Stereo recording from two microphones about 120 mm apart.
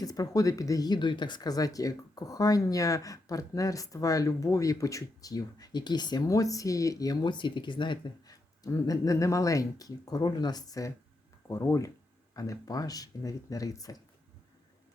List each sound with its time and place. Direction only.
0.0 s speech: 30° left (ahead or behind)